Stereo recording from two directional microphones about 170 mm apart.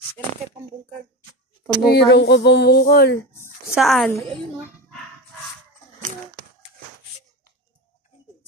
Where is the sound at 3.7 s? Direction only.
Centre (ahead or behind).